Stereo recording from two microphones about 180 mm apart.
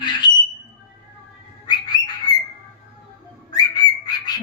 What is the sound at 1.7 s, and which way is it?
Bird, 20° left (ahead or behind).